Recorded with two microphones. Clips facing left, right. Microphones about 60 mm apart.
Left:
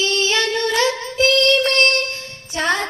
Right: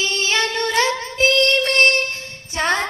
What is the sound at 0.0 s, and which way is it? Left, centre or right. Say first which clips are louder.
Female singing: left 2 dB; right.